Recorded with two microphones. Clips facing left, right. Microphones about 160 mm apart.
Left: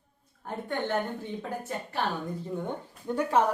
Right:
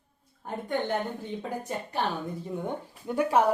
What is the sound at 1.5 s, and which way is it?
Speech, 15° right (ahead or behind).